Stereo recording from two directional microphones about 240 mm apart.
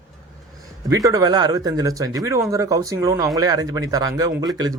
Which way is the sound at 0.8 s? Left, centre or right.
Centre.